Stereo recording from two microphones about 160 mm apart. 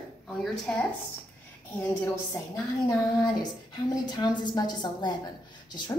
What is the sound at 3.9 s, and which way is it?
A woman's voice, 25° left (ahead or behind).